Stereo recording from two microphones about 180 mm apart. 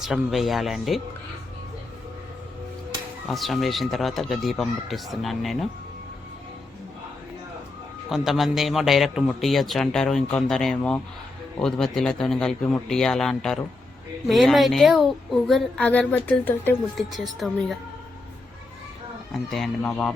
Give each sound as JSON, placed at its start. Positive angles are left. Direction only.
{"t": 0.0, "sound": "a man's voice", "side_deg": 0}
{"t": 3.2, "sound": "a man's voice", "side_deg": 0}
{"t": 8.1, "sound": "a man's voice", "side_deg": 0}
{"t": 19.3, "sound": "a man's voice", "side_deg": 0}